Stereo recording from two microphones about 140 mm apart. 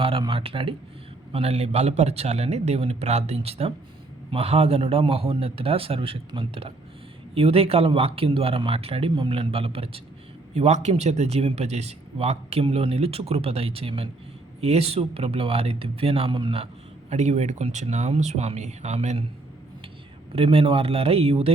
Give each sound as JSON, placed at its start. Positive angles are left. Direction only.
{"t": 0.0, "sound": "a man's voice", "side_deg": -40}
{"t": 10.5, "sound": "speech", "side_deg": -55}
{"t": 17.1, "sound": "speech", "side_deg": -55}
{"t": 20.3, "sound": "speech", "side_deg": -40}